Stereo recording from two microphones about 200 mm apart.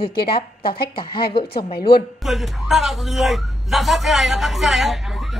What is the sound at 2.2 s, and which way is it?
A man's voice, centre (ahead or behind).